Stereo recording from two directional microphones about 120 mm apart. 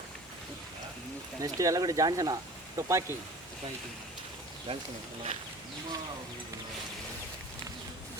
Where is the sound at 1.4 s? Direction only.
30° right (ahead or behind).